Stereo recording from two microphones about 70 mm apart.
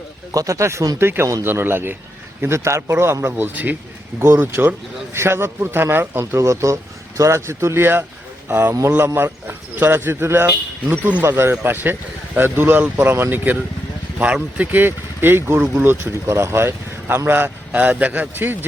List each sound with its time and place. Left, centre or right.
0.3 s speech: right
1.5 s speech: right
2.4 s speech: right
4.2 s a man's voice: right
14.6 s speech: right
15.5 s speech: centre
15.8 s speech: right
16.2 s speech: right
17.7 s a man's voice: right